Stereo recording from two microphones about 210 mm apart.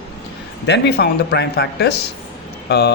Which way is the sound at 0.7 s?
50° left (ahead or behind).